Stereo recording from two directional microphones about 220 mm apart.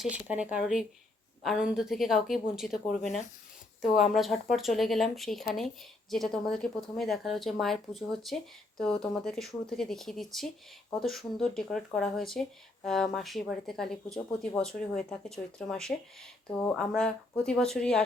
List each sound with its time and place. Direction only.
0.0 s speech: 5° right (ahead or behind)
4.1 s speech: centre (ahead or behind)